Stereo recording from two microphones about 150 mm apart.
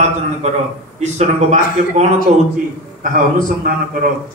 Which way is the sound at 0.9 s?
50° right (ahead or behind).